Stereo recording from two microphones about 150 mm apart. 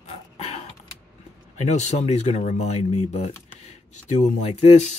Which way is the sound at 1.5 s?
50° left (ahead or behind).